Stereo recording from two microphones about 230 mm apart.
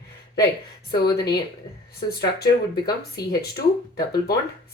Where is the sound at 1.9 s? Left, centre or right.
Left.